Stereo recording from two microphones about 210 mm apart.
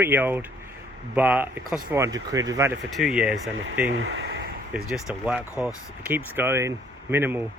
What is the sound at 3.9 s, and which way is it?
Speech, 60° right (ahead or behind).